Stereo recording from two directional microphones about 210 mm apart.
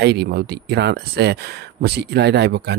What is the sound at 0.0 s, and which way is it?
Speech, 50° right (ahead or behind).